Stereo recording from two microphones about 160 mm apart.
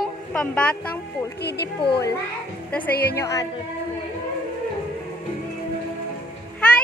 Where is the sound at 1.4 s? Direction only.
85° left.